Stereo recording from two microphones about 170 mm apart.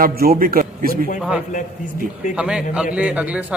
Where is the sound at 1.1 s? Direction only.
5° right (ahead or behind).